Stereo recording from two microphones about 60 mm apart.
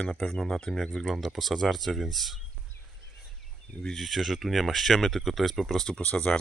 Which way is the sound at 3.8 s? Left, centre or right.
Centre.